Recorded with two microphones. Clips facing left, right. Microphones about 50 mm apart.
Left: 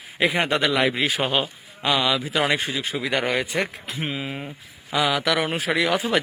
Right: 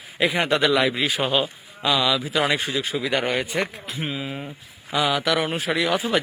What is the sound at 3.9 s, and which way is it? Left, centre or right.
Speech, left.